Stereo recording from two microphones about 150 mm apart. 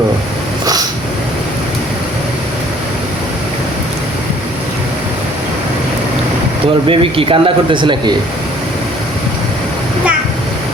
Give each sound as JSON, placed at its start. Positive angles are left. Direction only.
{"t": 0.6, "sound": "snort", "side_deg": -25}
{"t": 6.8, "sound": "speech", "side_deg": -35}